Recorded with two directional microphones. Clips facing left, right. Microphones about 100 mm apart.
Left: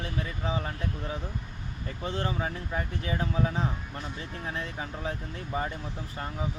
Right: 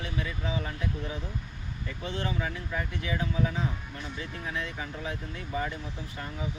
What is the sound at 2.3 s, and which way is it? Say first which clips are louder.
Speech: left 1 dB; 35° left (ahead or behind).